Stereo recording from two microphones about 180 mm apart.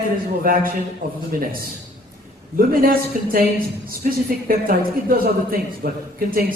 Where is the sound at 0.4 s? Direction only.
55° right (ahead or behind).